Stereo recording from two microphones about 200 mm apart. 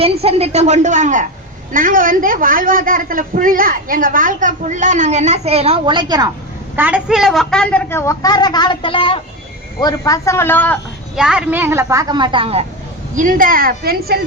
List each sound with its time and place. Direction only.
0.0 s a woman's voice: 30° right (ahead or behind)
6.7 s a woman's voice: 10° right (ahead or behind); by 10.8 s 10° left (ahead or behind)
11.1 s a woman's voice: 5° right (ahead or behind); by 12.6 s 25° right (ahead or behind)
13.1 s a man's voice: 45° right (ahead or behind)